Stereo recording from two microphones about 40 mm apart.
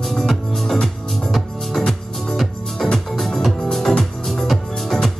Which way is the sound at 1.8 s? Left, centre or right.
Centre.